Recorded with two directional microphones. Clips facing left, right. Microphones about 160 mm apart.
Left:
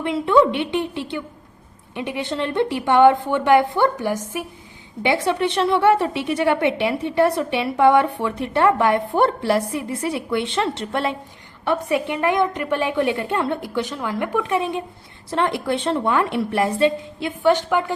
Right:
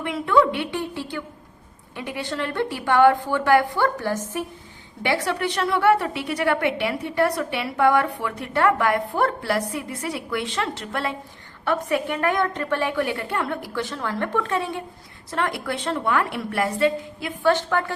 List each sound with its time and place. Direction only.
0.0 s a woman's voice: 25° left (ahead or behind)